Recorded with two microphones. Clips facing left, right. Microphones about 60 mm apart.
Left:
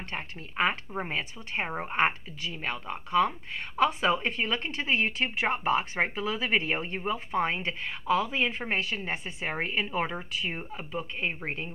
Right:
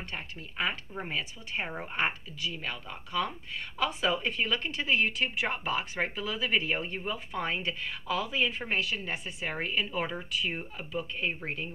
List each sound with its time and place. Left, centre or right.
0.1 s speech: left